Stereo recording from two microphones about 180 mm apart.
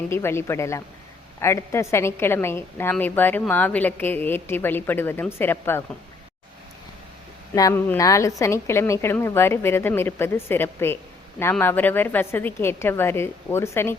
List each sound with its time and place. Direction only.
0.1 s a woman's voice: 15° left (ahead or behind)
7.5 s a woman's voice: 15° left (ahead or behind)